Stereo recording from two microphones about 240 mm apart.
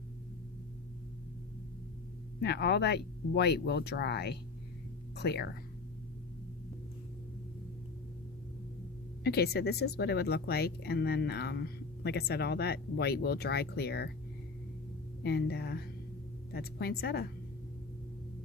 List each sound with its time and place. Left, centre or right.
2.4 s speech: left
9.2 s speech: left
15.2 s a woman's voice: left